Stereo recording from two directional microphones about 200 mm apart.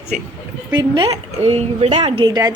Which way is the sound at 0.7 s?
20° right (ahead or behind).